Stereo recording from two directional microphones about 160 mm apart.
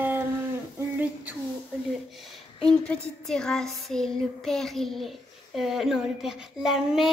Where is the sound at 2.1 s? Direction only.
Centre (ahead or behind).